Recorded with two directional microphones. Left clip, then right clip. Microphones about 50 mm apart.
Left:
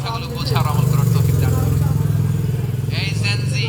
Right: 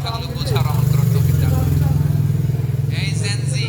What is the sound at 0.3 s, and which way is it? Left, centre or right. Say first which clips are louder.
Vehicle: left 2 dB; right.